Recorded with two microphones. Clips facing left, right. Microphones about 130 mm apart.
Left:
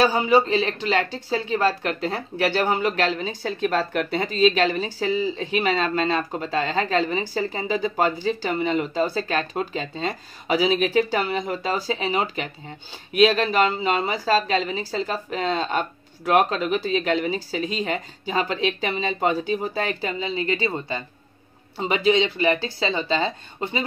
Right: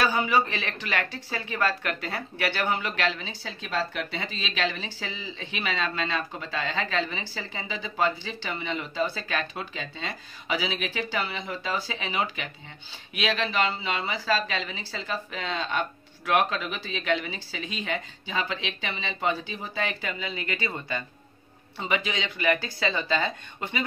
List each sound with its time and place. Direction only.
0.0 s speech: 30° left (ahead or behind)